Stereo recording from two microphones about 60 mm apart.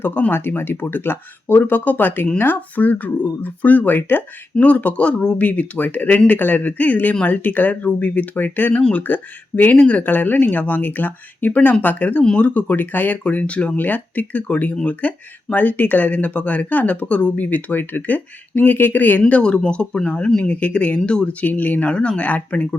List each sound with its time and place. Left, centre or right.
0.0 s speech: left
19.3 s speech: centre
21.5 s speech: left